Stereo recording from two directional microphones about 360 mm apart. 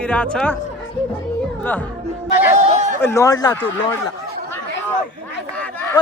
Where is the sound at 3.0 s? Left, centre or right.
Centre.